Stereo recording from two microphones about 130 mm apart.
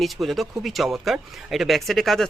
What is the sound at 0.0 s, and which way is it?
Speech, centre (ahead or behind).